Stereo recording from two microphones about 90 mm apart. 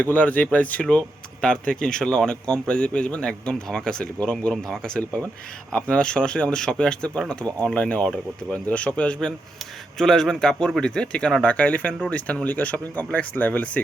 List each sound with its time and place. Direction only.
0.0 s a man's voice: 15° left (ahead or behind)